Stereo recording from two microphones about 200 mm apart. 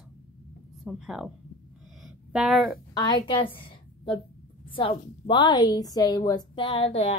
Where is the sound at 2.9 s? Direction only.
20° left (ahead or behind).